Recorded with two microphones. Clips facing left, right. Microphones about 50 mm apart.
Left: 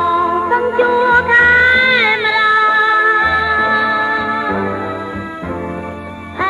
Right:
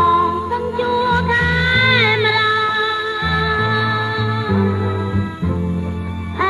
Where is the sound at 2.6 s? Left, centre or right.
Centre.